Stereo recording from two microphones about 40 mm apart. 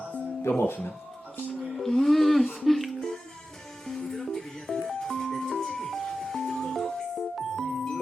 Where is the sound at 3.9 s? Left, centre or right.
Centre.